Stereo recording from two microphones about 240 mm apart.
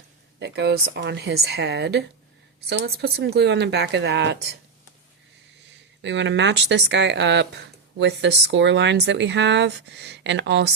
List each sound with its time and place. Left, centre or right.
0.3 s speech: right
6.0 s speech: right